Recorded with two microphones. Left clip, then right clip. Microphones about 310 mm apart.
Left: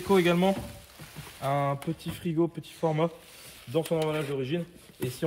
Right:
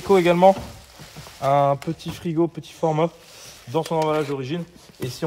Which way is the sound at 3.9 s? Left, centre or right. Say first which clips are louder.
Right 10 dB; centre.